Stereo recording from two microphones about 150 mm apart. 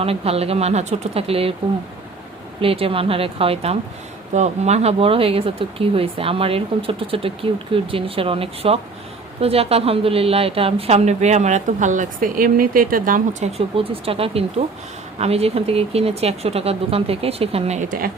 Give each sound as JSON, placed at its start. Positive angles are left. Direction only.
{"t": 0.0, "sound": "speech", "side_deg": -40}
{"t": 2.6, "sound": "a woman's voice", "side_deg": -40}
{"t": 13.6, "sound": "speech", "side_deg": -40}
{"t": 17.8, "sound": "speech", "side_deg": -70}